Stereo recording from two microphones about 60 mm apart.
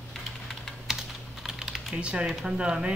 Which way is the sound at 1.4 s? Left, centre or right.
Centre.